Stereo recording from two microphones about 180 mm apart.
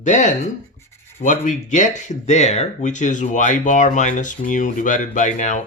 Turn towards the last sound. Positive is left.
turn(degrees=40)  # may be behind; listen again after turning